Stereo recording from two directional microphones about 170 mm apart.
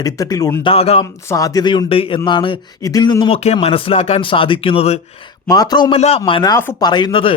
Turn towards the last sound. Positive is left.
turn(degrees=30)  # may be behind; listen again after turning